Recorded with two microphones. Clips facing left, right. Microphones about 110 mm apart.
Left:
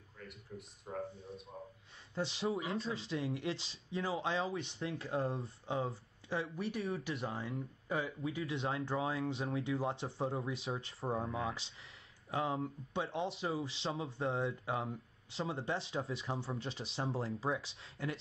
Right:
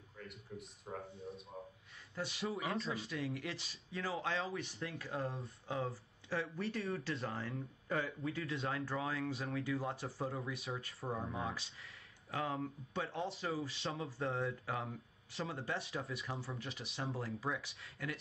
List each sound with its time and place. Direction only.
0.2 s a man's voice: centre (ahead or behind)
2.1 s speech: 25° left (ahead or behind)
8.5 s speech: 25° left (ahead or behind)